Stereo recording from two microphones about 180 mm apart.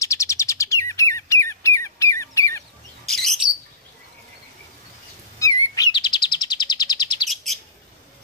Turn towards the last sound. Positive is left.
turn(degrees=0)  # may be behind; listen again after turning